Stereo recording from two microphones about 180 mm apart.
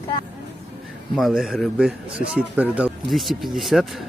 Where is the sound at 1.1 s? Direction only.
Centre (ahead or behind).